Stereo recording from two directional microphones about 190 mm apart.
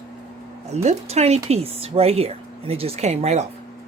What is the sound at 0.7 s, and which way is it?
Speech, 35° right (ahead or behind).